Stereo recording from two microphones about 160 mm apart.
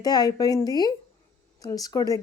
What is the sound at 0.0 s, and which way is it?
Speech, 25° left (ahead or behind).